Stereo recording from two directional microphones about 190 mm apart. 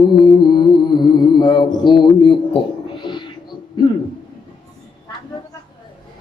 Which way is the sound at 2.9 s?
25° left (ahead or behind).